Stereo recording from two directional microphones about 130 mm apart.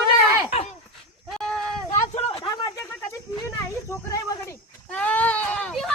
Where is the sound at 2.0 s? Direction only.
55° left (ahead or behind).